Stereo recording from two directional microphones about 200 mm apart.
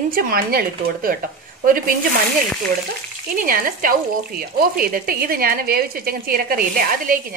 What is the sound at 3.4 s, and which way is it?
A woman's voice, 45° right (ahead or behind).